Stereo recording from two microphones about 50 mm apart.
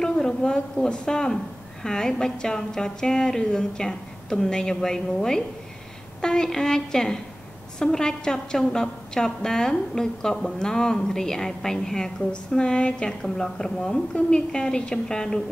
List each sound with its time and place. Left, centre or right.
0.0 s a woman's voice: centre